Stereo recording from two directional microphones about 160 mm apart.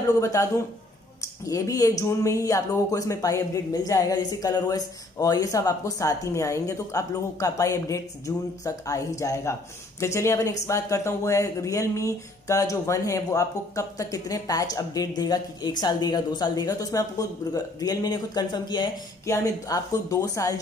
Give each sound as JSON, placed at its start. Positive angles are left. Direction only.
{"t": 0.0, "sound": "speech", "side_deg": 20}